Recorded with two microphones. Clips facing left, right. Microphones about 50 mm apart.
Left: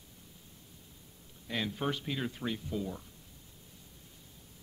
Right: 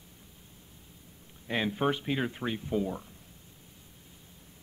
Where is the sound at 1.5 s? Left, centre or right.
Right.